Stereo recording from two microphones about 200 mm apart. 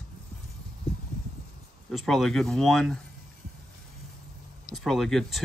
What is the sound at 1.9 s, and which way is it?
Speech, centre (ahead or behind).